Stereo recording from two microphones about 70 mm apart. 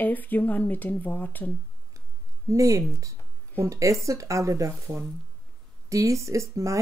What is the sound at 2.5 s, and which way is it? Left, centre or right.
Speech, right.